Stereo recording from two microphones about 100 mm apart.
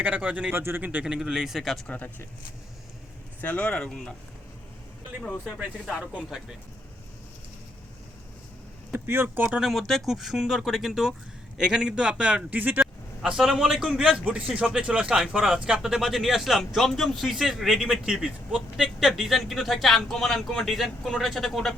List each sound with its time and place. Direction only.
0.0 s speech: 15° right (ahead or behind)
1.9 s speech: 15° left (ahead or behind)
3.4 s speech: 15° left (ahead or behind)
5.5 s speech: 10° right (ahead or behind)
8.9 s speech: 25° right (ahead or behind)
9.6 s a man's voice: centre (ahead or behind); by 12.8 s 15° right (ahead or behind)
12.8 s a man's voice: 5° right (ahead or behind)